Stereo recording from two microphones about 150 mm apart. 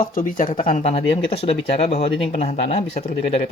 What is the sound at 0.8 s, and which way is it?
Speech, 40° left (ahead or behind).